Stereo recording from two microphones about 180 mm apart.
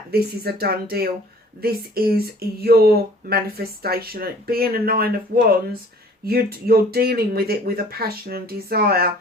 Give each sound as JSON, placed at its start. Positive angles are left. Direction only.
{"t": 0.1, "sound": "speech", "side_deg": -60}